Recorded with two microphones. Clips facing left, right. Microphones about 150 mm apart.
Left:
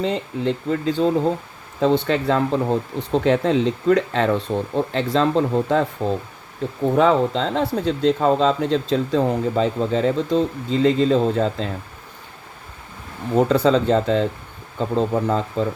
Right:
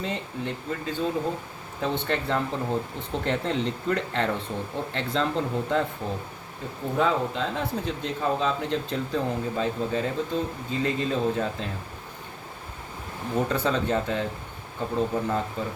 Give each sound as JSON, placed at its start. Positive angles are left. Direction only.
{"t": 0.0, "sound": "speech", "side_deg": 90}
{"t": 13.3, "sound": "speech", "side_deg": 90}